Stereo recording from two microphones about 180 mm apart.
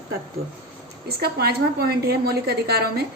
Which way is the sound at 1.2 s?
60° right (ahead or behind).